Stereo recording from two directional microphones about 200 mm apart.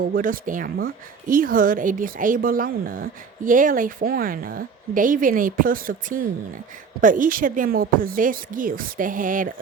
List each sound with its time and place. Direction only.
0.0 s a woman's voice: 45° right (ahead or behind)